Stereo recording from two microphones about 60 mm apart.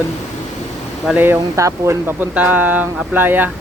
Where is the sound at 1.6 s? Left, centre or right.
Right.